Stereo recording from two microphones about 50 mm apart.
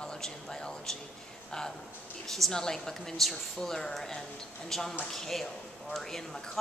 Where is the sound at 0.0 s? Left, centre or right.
Centre.